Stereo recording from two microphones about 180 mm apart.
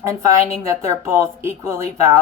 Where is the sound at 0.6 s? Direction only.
15° right (ahead or behind).